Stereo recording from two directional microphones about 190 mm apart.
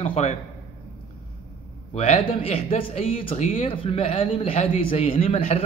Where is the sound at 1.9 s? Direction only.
30° left (ahead or behind).